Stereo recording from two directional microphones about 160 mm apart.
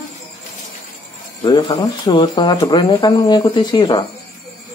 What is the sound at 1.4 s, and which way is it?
Speech, 30° left (ahead or behind).